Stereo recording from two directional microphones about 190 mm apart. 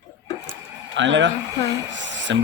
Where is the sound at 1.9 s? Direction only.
75° right (ahead or behind).